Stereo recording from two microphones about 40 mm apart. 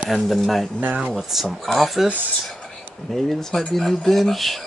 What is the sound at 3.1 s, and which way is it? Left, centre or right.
Speech, centre.